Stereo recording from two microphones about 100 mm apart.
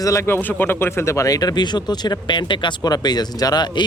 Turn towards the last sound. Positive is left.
turn(degrees=45)  # may be behind; listen again after turning